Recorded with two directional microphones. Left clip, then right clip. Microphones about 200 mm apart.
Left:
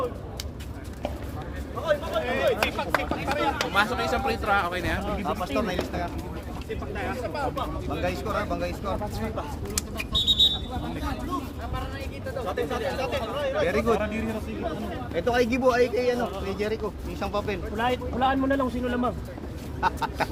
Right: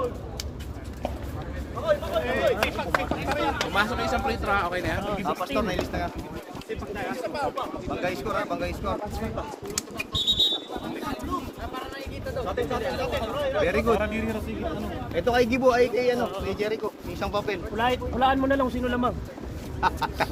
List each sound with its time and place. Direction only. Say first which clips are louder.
1.8 s a sound: right 1 dB; 50° left (ahead or behind)
5.2 s speech: right 1 dB; 20° right (ahead or behind)
7.2 s speech: right 2 dB; 60° right (ahead or behind)
7.6 s speech: even; 10° right (ahead or behind)
10.1 s a sound: left 2 dB; 10° right (ahead or behind)
13.0 s speech: even; 15° left (ahead or behind)
13.9 s speech: right 1 dB; 25° right (ahead or behind)
15.1 s speech: right 1 dB; centre (ahead or behind)
17.7 s speech: right 2 dB; 20° right (ahead or behind)
19.8 s speech: right 1 dB; 10° right (ahead or behind)